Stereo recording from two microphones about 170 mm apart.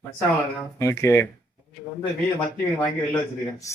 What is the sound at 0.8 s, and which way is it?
Speech, 15° left (ahead or behind).